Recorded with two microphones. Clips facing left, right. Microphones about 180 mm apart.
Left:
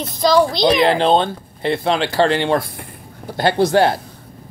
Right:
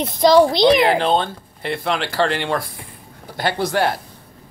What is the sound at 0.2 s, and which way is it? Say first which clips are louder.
Speech: right 2 dB; 25° right (ahead or behind).